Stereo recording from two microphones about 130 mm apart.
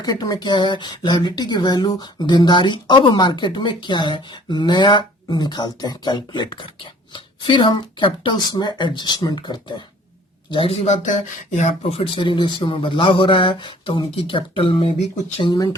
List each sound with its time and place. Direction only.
0.0 s speech: 30° left (ahead or behind)
10.5 s a man's voice: 45° left (ahead or behind)